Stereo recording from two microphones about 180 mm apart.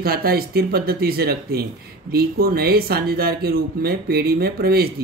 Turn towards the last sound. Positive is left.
turn(degrees=-60)  # may be behind; listen again after turning